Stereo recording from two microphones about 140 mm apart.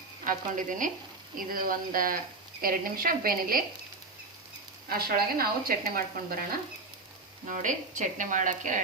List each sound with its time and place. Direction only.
0.3 s speech: 70° right (ahead or behind)
1.4 s a woman's voice: 90° right
4.9 s a woman's voice: 90° right
7.4 s speech: 65° right (ahead or behind)